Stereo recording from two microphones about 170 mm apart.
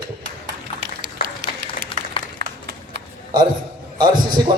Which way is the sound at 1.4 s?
90° right.